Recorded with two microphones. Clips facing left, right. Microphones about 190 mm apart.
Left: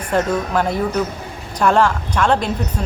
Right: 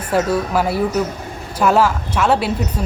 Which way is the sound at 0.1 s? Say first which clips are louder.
Right 1 dB; 5° right (ahead or behind).